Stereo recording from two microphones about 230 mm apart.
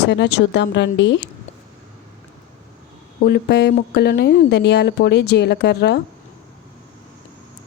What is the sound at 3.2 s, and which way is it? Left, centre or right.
Speech, left.